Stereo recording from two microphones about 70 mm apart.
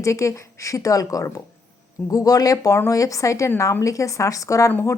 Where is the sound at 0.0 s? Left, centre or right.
Left.